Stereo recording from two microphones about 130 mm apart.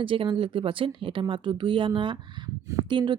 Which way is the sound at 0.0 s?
40° right (ahead or behind).